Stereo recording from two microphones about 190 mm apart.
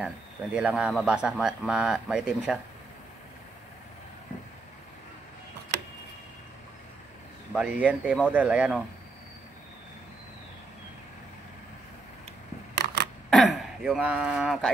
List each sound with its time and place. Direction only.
0.6 s speech: 5° right (ahead or behind)
7.5 s speech: 10° right (ahead or behind)
12.7 s camera: 65° right (ahead or behind)
13.3 s speech: centre (ahead or behind)